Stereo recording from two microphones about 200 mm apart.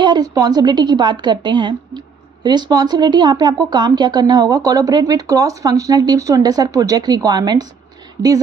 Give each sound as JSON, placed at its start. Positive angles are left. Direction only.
{"t": 0.0, "sound": "a woman's voice", "side_deg": -20}